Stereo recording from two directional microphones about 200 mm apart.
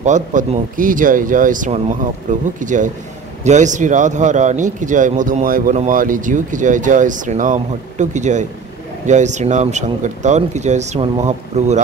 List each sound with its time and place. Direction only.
0.0 s a man's voice: 40° right (ahead or behind)